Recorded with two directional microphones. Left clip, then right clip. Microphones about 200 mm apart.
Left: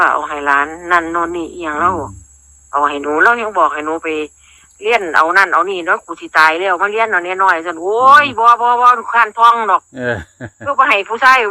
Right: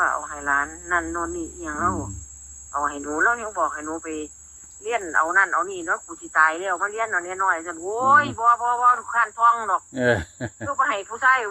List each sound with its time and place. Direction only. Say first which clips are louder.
0.0 s speech: left 10 dB; 40° left (ahead or behind)
9.9 s speech: left 1 dB; 20° left (ahead or behind)
10.7 s speech: left 11 dB; 40° left (ahead or behind)